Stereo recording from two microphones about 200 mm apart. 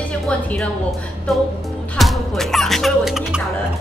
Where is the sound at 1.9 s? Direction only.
Centre (ahead or behind).